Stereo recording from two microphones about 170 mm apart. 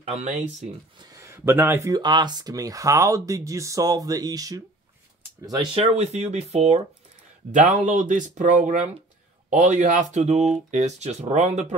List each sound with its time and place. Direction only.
0.0 s speech: 40° right (ahead or behind)
1.1 s speech: 15° right (ahead or behind)
5.8 s speech: 40° right (ahead or behind)